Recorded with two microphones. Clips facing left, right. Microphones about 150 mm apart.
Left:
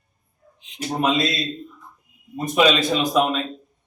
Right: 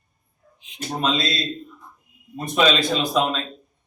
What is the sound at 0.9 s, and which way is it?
Speech, 15° left (ahead or behind).